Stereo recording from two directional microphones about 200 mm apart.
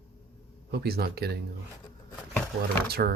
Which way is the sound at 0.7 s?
50° right (ahead or behind).